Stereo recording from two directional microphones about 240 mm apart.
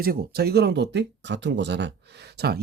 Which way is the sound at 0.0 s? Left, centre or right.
Right.